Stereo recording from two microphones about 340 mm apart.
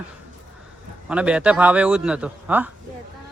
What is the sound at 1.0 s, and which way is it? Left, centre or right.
Speech, centre.